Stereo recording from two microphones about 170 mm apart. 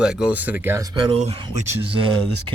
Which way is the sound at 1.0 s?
35° right (ahead or behind).